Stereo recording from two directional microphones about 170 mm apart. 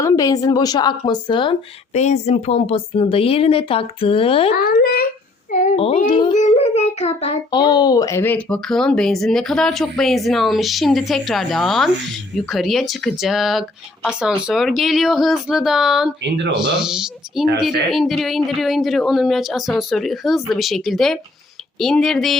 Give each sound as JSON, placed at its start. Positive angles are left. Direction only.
{"t": 0.0, "sound": "a woman's voice", "side_deg": 20}
{"t": 1.9, "sound": "speech", "side_deg": 40}
{"t": 4.5, "sound": "a child's voice", "side_deg": 60}
{"t": 5.5, "sound": "a sound", "side_deg": 45}
{"t": 6.1, "sound": "a woman's voice", "side_deg": 25}
{"t": 6.3, "sound": "child singing", "side_deg": 40}
{"t": 7.5, "sound": "speech", "side_deg": 25}